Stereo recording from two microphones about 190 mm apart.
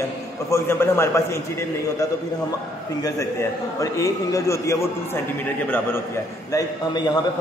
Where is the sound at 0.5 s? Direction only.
15° left (ahead or behind).